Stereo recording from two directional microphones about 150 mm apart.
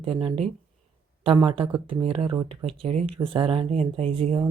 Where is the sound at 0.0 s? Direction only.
35° right (ahead or behind).